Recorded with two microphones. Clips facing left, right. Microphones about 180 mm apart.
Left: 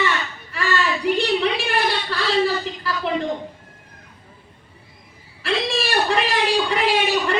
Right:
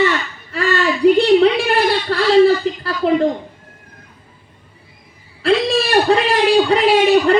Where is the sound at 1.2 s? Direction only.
60° right (ahead or behind).